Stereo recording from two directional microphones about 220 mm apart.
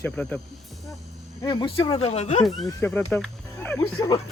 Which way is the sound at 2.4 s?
Centre (ahead or behind).